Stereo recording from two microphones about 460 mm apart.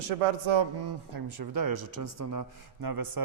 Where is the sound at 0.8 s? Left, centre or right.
Right.